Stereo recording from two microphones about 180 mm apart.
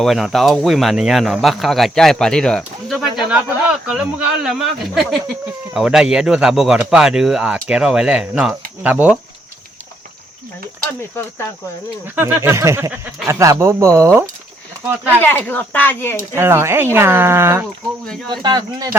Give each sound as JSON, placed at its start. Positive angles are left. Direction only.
{"t": 0.0, "sound": "speech", "side_deg": 0}
{"t": 11.2, "sound": "speech", "side_deg": 10}
{"t": 12.0, "sound": "speech", "side_deg": -10}
{"t": 15.2, "sound": "speech", "side_deg": 10}
{"t": 16.3, "sound": "speech", "side_deg": -15}
{"t": 18.0, "sound": "speech", "side_deg": 5}
{"t": 18.4, "sound": "speech", "side_deg": -25}